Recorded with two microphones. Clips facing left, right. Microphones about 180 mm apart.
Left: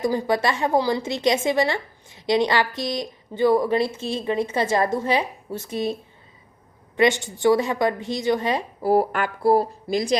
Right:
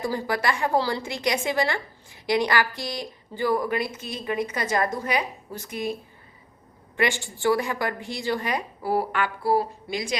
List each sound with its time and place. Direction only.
0.0 s a woman's voice: 20° left (ahead or behind)
8.8 s speech: 45° left (ahead or behind)